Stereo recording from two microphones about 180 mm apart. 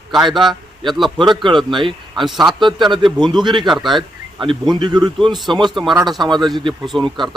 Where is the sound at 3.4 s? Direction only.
25° right (ahead or behind).